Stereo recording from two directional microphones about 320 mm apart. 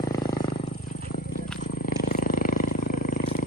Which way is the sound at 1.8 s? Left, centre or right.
Left.